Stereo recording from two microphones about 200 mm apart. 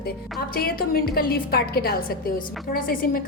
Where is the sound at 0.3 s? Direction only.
45° left (ahead or behind).